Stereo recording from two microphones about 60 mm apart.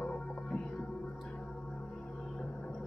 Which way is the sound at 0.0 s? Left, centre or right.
Centre.